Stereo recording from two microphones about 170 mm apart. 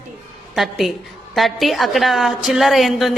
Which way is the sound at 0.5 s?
Centre (ahead or behind).